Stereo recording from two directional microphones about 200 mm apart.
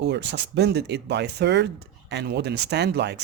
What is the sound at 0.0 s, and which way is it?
A woman's voice, 60° right (ahead or behind).